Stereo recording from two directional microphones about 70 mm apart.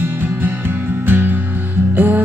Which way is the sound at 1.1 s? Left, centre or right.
Right.